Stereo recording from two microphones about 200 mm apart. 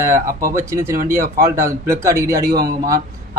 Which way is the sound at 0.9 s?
45° right (ahead or behind).